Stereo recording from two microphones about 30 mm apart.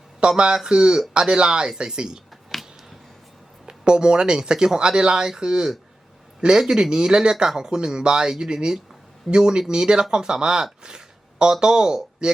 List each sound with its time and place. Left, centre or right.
0.2 s speech: right
2.5 s a sound: centre
3.7 s speech: right
12.2 s speech: right